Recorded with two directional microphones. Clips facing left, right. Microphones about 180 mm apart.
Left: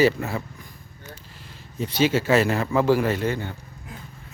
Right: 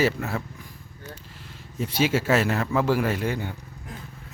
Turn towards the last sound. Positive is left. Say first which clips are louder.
# left 2 dB
turn(degrees=-10)  # may be behind; listen again after turning